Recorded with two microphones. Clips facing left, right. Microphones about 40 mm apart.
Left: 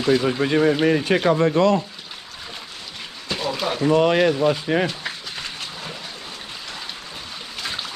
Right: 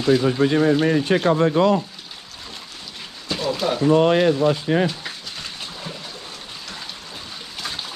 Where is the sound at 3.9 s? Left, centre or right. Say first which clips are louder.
Even; left.